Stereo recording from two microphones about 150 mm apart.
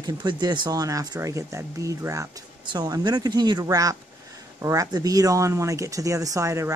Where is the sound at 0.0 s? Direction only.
30° right (ahead or behind).